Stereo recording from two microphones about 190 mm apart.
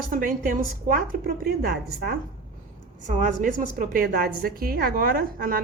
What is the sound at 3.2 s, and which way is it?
A woman's voice, 40° right (ahead or behind).